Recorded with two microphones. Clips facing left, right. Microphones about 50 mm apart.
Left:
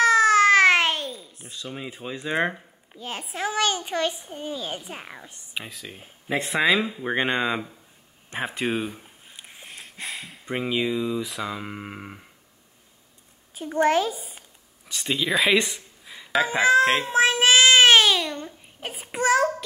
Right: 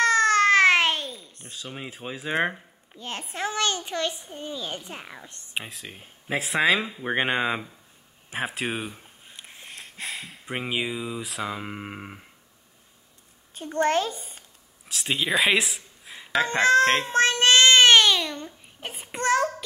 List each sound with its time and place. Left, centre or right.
0.0 s babbling: centre
1.9 s a child's voice: centre
5.5 s speech: right
5.9 s speech: centre
8.3 s a sound: centre
10.5 s speech: centre
13.6 s speech: centre
15.0 s speech: centre
16.3 s baby cry: centre